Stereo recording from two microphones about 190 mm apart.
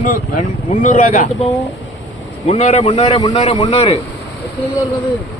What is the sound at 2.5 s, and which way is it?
Speech, 35° left (ahead or behind).